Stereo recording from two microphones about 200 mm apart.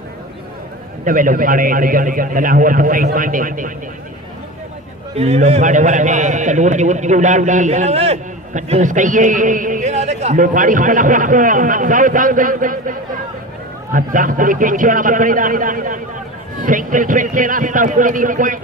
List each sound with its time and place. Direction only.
1.0 s a man's voice: 45° right (ahead or behind)
5.1 s a man's voice: 30° right (ahead or behind)